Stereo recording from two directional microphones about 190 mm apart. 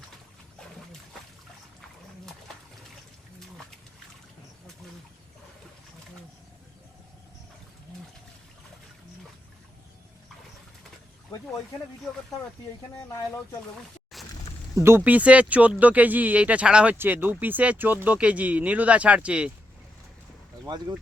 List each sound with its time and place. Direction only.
12.9 s speech: 15° left (ahead or behind)
14.1 s a sound: centre (ahead or behind)
14.8 s speech: 10° right (ahead or behind)
20.7 s speech: 20° right (ahead or behind)